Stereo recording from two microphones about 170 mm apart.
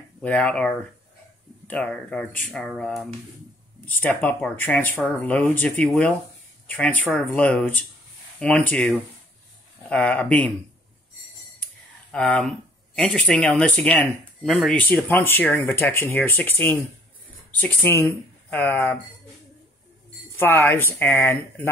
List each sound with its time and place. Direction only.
0.2 s speech: 10° left (ahead or behind)
11.6 s speech: 10° left (ahead or behind)
20.3 s speech: 10° left (ahead or behind)